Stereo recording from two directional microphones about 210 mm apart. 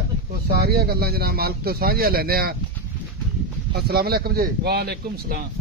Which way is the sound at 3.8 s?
50° right (ahead or behind).